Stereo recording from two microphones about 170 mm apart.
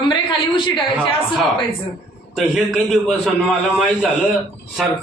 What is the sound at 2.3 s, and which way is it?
A man's voice, centre (ahead or behind).